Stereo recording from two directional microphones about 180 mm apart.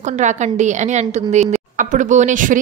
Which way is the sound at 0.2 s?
40° right (ahead or behind).